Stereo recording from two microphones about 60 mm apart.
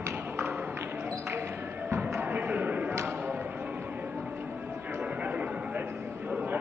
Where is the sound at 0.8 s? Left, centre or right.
Right.